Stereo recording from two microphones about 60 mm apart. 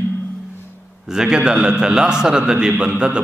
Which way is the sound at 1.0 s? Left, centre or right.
Centre.